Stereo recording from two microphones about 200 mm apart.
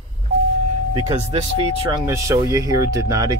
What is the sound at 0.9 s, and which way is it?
A man's voice, 25° right (ahead or behind).